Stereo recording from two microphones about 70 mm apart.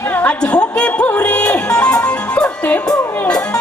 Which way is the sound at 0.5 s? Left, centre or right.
Centre.